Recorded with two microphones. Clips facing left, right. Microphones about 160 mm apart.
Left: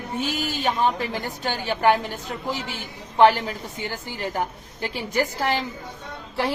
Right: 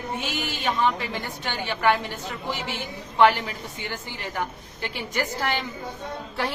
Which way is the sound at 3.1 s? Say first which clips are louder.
Left 2 dB; 40° left (ahead or behind).